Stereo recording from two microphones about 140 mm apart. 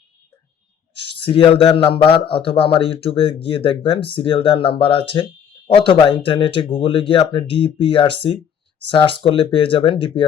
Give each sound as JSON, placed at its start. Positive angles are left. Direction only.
{"t": 1.0, "sound": "speech", "side_deg": 40}